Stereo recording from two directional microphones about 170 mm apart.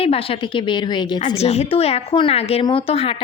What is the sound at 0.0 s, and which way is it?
A woman's voice, 35° left (ahead or behind).